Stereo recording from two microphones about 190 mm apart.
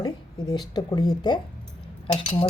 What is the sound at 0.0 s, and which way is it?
Speech, 20° left (ahead or behind).